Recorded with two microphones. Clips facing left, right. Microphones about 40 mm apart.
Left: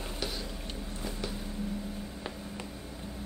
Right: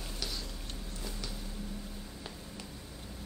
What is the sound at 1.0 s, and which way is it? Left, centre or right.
Vehicle, left.